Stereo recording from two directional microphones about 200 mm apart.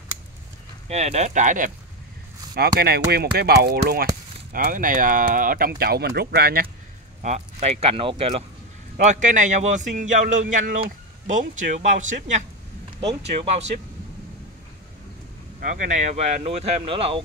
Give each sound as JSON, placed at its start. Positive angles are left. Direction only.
{"t": 0.8, "sound": "a man's voice", "side_deg": -35}
{"t": 2.5, "sound": "speech", "side_deg": -50}
{"t": 7.2, "sound": "a man's voice", "side_deg": -35}
{"t": 15.6, "sound": "a man's voice", "side_deg": -40}